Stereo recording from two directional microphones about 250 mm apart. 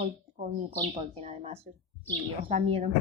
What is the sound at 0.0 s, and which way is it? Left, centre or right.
Bird, right.